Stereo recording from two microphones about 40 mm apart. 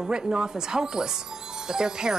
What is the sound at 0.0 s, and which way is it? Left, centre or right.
Speech, centre.